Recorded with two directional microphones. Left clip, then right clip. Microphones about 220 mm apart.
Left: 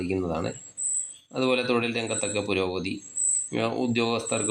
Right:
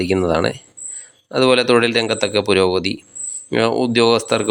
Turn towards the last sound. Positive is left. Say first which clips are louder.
# right 12 dB
turn(degrees=-35)  # may be behind; listen again after turning